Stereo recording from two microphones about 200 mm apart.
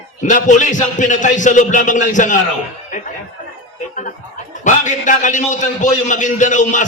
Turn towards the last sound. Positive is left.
turn(degrees=40)  # may be behind; listen again after turning